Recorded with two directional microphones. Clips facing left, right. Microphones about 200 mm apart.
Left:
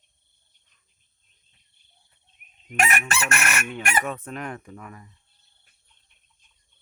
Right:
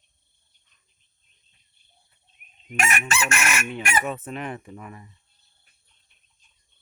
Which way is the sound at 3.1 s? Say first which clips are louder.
Right 1 dB; 60° left (ahead or behind).